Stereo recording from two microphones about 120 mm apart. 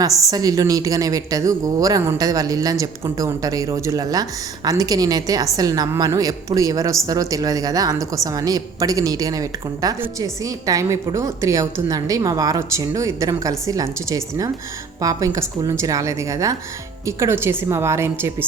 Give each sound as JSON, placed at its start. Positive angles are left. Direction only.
{"t": 0.3, "sound": "a woman's voice", "side_deg": -30}